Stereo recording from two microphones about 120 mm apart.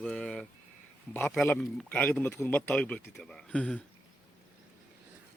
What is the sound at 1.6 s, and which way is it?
Speech, centre (ahead or behind).